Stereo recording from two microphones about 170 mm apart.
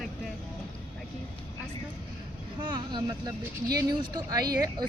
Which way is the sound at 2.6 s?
30° right (ahead or behind).